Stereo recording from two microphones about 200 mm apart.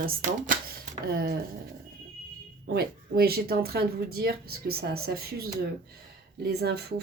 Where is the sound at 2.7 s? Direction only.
50° right (ahead or behind).